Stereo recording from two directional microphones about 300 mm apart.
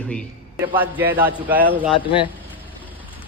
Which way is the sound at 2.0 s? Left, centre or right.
Centre.